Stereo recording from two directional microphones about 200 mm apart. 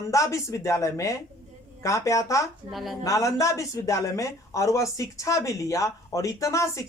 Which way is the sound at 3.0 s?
15° left (ahead or behind).